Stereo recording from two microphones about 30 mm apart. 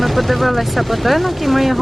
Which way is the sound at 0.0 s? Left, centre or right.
Centre.